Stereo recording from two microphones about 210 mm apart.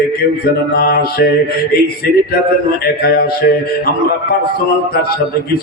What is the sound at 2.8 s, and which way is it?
Speech, 50° left (ahead or behind).